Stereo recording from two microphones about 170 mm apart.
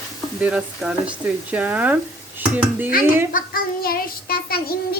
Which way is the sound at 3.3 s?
60° left (ahead or behind).